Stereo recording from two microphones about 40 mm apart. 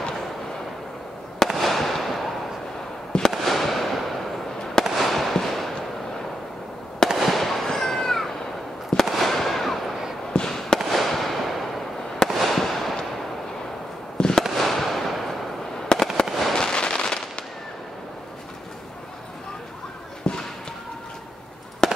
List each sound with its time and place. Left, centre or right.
1.5 s fireworks: centre
3.1 s fireworks: centre
3.3 s fireworks: centre
4.9 s a sound: centre
7.2 s fireworks: centre
10.3 s fireworks: centre
10.9 s fireworks: centre
14.1 s fireworks: centre
14.5 s fireworks: centre
15.9 s fireworks: centre
16.3 s fireworks: centre
16.5 s fireworks: centre
20.2 s a sound: left
21.8 s fireworks: centre